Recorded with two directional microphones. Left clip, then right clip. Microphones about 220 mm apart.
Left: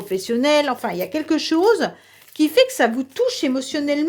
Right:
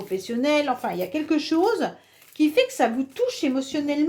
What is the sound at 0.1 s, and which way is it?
Speech, 45° left (ahead or behind).